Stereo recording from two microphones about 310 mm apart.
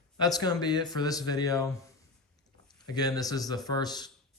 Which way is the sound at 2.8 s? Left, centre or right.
Centre.